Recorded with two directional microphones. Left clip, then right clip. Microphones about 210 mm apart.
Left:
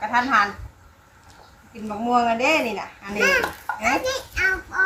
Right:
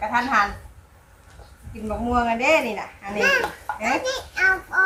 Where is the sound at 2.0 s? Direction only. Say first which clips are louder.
Left 1 dB; 10° left (ahead or behind).